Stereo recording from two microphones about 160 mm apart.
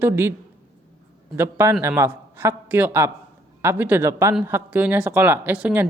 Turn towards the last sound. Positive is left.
turn(degrees=-10)  # may be behind; listen again after turning